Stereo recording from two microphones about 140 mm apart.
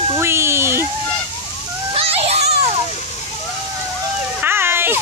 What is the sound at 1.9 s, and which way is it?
Children playing, 45° right (ahead or behind).